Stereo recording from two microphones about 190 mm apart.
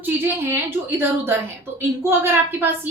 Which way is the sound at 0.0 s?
10° right (ahead or behind).